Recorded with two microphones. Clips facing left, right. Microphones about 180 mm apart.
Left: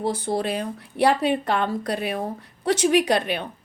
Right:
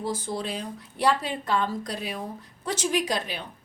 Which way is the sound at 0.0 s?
65° left (ahead or behind).